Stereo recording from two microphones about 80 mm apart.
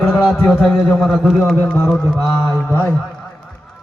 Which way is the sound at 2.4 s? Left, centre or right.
Left.